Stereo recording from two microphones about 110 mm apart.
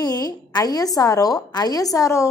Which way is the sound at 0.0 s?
35° left (ahead or behind).